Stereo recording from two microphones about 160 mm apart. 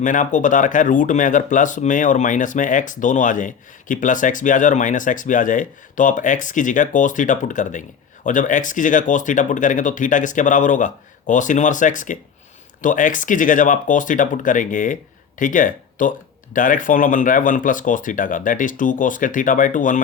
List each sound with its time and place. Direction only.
0.0 s speech: 50° left (ahead or behind)